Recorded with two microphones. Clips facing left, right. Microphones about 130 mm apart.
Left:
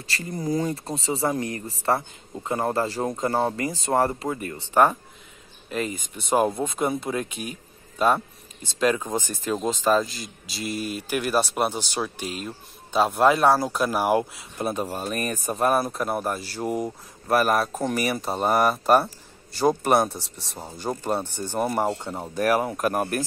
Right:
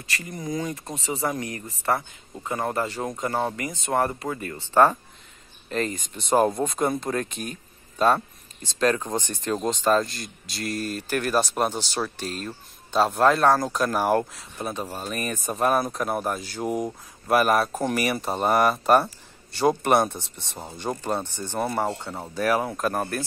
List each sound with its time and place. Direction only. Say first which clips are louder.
0.0 s speech: left 3 dB; 30° left (ahead or behind)
5.7 s speech: right 1 dB; 10° left (ahead or behind)
8.7 s speech: even; 10° left (ahead or behind)
15.1 s speech: even; 40° left (ahead or behind)
15.4 s speech: even; 5° left (ahead or behind)